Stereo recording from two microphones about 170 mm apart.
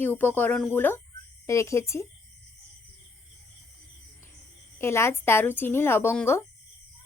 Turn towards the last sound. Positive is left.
turn(degrees=15)  # may be behind; listen again after turning